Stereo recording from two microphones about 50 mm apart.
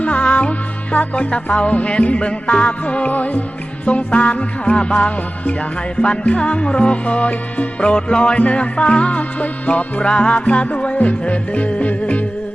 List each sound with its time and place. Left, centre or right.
0.0 s music: left